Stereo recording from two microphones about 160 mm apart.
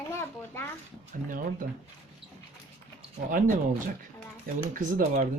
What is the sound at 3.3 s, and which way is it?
Speech, 55° right (ahead or behind).